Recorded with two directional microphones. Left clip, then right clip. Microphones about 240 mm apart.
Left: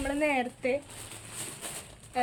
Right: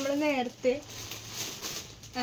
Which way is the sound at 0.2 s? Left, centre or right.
Left.